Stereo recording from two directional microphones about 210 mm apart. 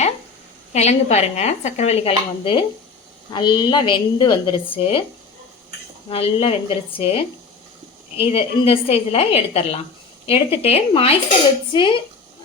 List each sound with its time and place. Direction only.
0.7 s a woman's voice: 30° left (ahead or behind)
6.1 s a woman's voice: 25° left (ahead or behind)